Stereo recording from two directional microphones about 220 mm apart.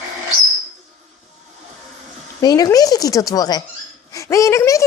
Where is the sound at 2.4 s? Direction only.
15° left (ahead or behind).